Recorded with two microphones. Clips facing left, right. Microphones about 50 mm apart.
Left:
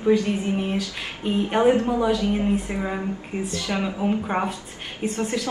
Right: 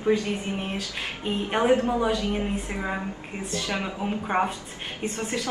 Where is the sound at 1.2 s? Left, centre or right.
Centre.